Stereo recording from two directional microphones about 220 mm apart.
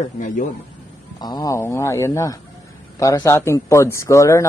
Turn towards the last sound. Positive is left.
turn(degrees=15)  # may be behind; listen again after turning